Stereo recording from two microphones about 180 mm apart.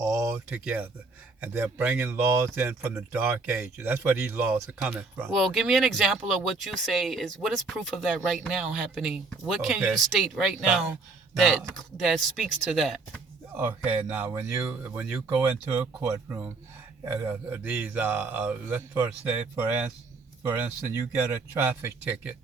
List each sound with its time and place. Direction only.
0.0 s a sound: 15° right (ahead or behind)
0.6 s speech: 5° right (ahead or behind)
5.4 s speech: centre (ahead or behind)
13.5 s speech: 10° right (ahead or behind)